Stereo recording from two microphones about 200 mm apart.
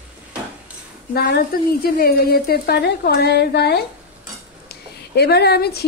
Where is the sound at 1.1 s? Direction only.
50° left (ahead or behind).